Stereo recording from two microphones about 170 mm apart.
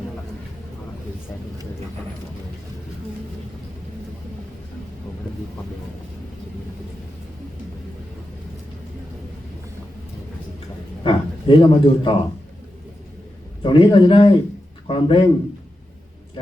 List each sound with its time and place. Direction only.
11.0 s a man's voice: 30° left (ahead or behind)
13.6 s a man's voice: 30° left (ahead or behind)